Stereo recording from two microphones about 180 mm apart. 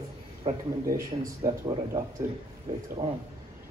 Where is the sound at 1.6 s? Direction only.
25° right (ahead or behind).